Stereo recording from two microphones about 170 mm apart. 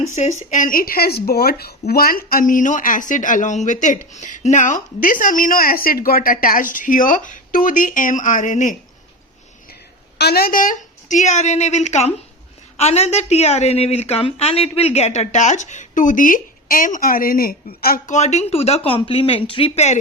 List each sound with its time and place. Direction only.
0.2 s speech: 45° left (ahead or behind)
10.2 s a woman's voice: 70° left (ahead or behind); by 20.0 s 40° left (ahead or behind)